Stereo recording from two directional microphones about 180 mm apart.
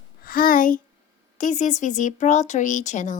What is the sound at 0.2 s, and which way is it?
A child's voice, 55° left (ahead or behind).